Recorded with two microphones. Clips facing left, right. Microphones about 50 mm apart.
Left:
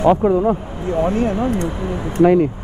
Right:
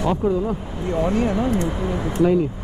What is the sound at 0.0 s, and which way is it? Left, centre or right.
Speech, left.